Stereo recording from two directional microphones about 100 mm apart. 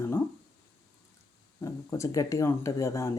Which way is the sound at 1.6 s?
30° left (ahead or behind).